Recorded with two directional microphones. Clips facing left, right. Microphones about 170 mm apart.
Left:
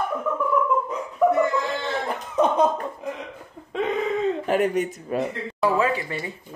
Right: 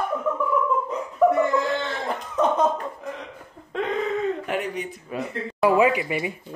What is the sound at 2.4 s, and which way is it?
Cough, 10° left (ahead or behind).